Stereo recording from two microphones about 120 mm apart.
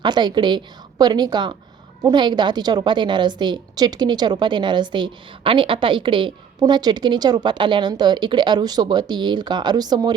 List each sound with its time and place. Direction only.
0.0 s a woman's voice: 35° right (ahead or behind)